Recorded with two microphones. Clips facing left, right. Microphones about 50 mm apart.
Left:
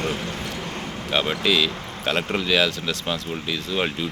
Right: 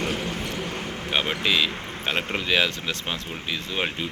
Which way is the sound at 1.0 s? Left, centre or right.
Centre.